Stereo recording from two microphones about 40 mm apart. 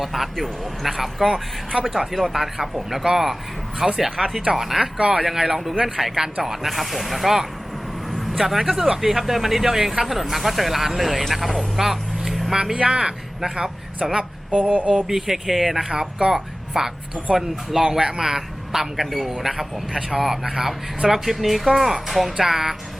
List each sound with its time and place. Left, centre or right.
0.0 s speech: centre
4.9 s speech: right
5.2 s speech: centre
12.7 s speech: right
14.2 s a sound: right
15.0 s speech: centre
17.7 s speech: centre